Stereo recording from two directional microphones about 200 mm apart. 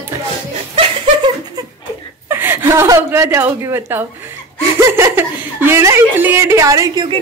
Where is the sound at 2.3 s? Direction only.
10° right (ahead or behind).